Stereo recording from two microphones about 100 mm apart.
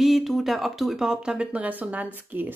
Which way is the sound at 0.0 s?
Centre (ahead or behind).